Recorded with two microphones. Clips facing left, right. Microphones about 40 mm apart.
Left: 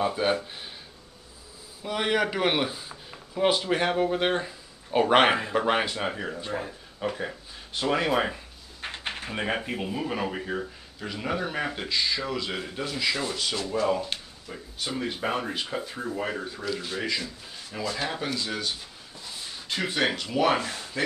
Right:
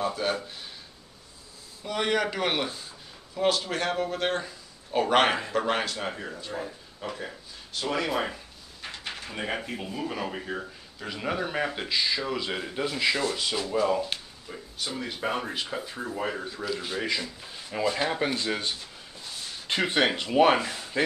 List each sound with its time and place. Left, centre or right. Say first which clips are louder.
0.0 s speech: left 3 dB; centre
1.8 s speech: left 1 dB; centre
8.8 s a sound: left 3 dB; left
9.7 s speech: left 3 dB; centre
16.8 s speech: even; centre; by 18.7 s right
19.7 s speech: right 2 dB; right